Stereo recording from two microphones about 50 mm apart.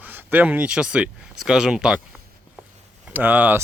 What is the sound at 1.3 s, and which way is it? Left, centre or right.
Speech, centre.